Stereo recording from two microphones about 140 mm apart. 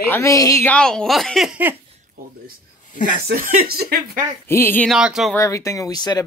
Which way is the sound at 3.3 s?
90° right.